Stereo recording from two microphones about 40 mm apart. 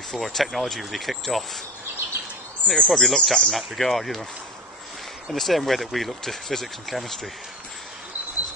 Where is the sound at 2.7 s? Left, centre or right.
Centre.